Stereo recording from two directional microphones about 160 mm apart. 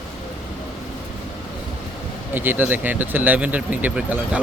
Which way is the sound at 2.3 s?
10° right (ahead or behind).